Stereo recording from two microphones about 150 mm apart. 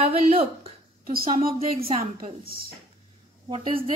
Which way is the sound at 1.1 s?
75° right (ahead or behind).